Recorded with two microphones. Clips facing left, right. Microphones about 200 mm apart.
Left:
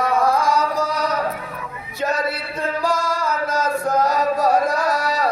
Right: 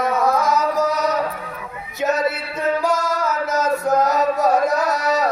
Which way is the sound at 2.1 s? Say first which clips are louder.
Right 2 dB; 20° right (ahead or behind).